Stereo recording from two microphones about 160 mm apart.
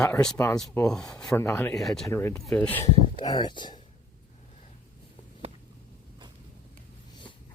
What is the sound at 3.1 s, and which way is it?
Speech, 25° left (ahead or behind).